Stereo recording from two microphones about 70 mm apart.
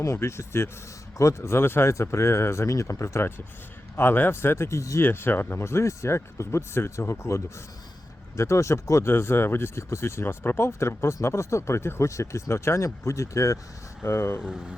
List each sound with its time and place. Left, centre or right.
0.0 s speech: left
5.0 s speech: left
14.0 s speech: left
14.4 s speech: centre